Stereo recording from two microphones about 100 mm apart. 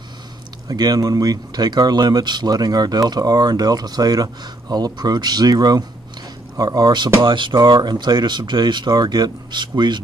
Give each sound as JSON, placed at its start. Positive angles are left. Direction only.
{"t": 0.7, "sound": "speech", "side_deg": -40}
{"t": 7.2, "sound": "speech", "side_deg": -55}